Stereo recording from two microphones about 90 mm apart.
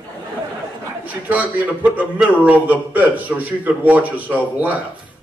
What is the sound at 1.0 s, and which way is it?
A man's voice, 15° right (ahead or behind).